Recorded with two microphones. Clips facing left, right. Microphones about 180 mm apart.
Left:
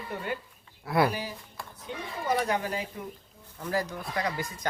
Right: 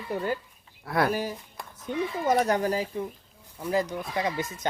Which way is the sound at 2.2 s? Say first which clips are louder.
Right 4 dB; 45° right (ahead or behind).